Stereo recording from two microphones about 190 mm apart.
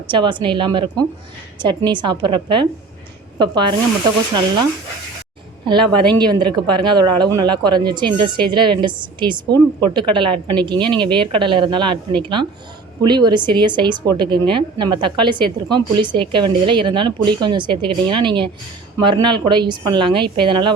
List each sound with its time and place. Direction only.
0.1 s a woman's voice: 25° right (ahead or behind)
5.6 s a woman's voice: 25° right (ahead or behind)